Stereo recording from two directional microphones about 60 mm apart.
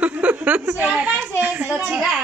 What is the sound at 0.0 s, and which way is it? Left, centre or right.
Chuckle, right.